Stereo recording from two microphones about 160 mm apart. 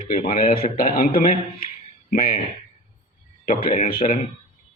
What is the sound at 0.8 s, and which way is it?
A man's voice, 60° left (ahead or behind).